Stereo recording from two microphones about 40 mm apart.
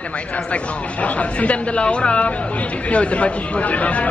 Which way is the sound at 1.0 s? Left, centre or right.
Left.